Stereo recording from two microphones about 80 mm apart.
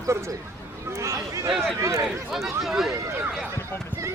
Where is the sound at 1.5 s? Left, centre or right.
Centre.